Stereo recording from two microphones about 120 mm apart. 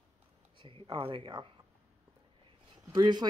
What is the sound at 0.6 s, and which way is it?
Speech, 45° right (ahead or behind).